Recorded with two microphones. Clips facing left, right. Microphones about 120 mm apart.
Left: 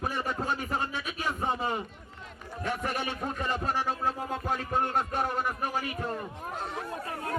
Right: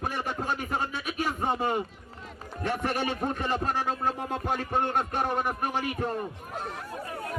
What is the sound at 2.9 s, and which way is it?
Speech, 25° right (ahead or behind).